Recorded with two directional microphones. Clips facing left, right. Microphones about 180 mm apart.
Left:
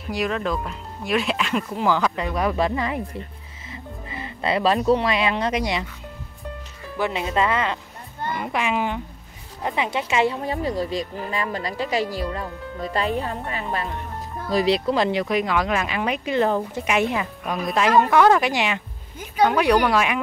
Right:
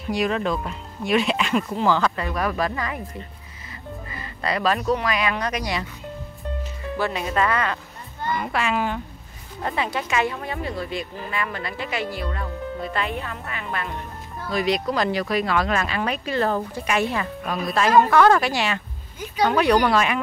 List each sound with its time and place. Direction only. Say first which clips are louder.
0.1 s speech: right 1 dB; centre (ahead or behind)
1.9 s speech: left 1 dB; 10° left (ahead or behind)
4.1 s speech: left 3 dB; 25° left (ahead or behind)
7.0 s speech: left 1 dB; 20° left (ahead or behind)